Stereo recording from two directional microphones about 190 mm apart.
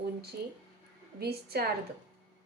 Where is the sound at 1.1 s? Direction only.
55° right (ahead or behind).